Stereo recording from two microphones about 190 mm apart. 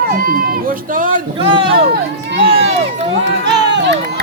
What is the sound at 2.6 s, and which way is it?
Run, 35° right (ahead or behind).